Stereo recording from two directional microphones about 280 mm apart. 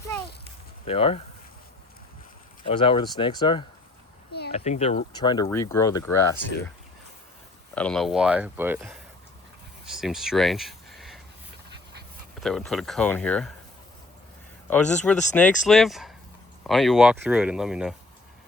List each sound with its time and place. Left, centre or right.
0.9 s speech: left
2.6 s speech: centre
4.3 s a sound: left
4.5 s speech: left
7.8 s speech: centre
12.4 s speech: centre
14.7 s speech: centre